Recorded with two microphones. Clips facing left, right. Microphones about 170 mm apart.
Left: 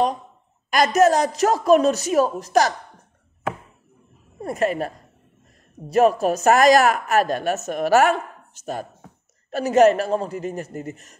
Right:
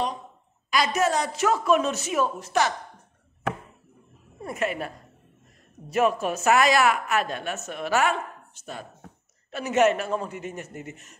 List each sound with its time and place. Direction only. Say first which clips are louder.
0.7 s a woman's voice: left 7 dB; 45° left (ahead or behind)
4.4 s a woman's voice: left 6 dB; 35° left (ahead or behind)